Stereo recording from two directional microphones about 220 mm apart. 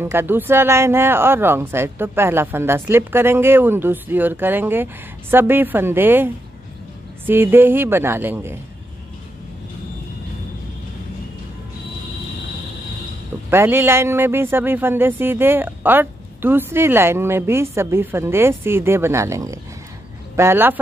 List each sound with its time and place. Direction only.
0.0 s a man's voice: 10° right (ahead or behind)
13.5 s a man's voice: 10° right (ahead or behind)